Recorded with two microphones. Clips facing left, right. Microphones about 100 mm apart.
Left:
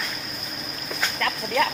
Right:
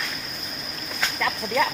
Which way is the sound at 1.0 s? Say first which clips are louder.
Right 1 dB; 5° right (ahead or behind).